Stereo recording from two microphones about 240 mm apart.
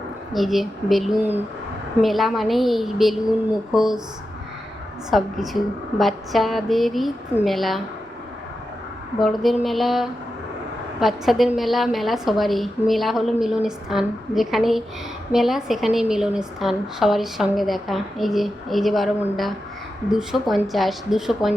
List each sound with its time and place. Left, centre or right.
0.3 s a woman's voice: centre
5.1 s a woman's voice: centre
9.1 s a woman's voice: centre